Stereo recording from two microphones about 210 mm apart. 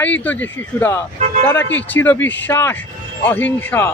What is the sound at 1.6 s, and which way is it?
Speech, 60° left (ahead or behind).